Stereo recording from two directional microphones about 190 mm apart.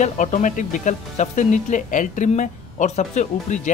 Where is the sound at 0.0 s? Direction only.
40° left (ahead or behind).